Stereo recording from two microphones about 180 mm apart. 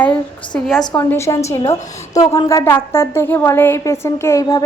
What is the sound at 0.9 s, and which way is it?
A woman's voice, 15° left (ahead or behind).